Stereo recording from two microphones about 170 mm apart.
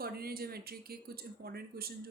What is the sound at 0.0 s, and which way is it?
Speech, 65° right (ahead or behind).